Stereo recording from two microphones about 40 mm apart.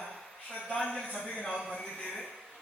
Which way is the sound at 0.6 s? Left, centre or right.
Left.